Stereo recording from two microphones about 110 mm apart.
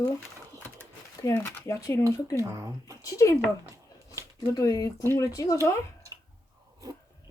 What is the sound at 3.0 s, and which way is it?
Speech, 30° left (ahead or behind).